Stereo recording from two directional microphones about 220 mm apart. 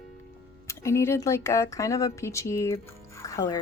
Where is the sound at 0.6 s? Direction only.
10° left (ahead or behind).